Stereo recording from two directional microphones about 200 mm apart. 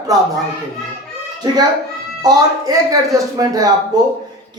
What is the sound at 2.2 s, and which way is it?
Speech, 20° right (ahead or behind).